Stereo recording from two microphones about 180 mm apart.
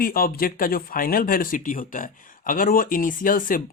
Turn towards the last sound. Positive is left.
turn(degrees=50)  # may be behind; listen again after turning